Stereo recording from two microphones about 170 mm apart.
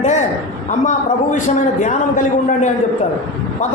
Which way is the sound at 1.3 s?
45° left (ahead or behind).